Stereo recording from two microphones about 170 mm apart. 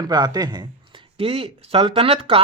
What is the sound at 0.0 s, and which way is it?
Speech, 25° right (ahead or behind).